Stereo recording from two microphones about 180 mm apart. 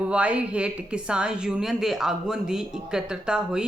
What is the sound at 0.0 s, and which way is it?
A woman's voice, 5° right (ahead or behind).